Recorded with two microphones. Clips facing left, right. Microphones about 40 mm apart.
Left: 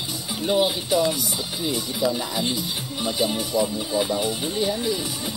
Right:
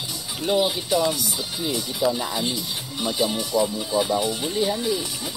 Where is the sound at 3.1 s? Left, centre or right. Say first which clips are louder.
Even; left.